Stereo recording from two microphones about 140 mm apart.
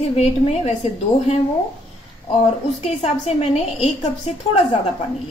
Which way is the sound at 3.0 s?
45° left (ahead or behind).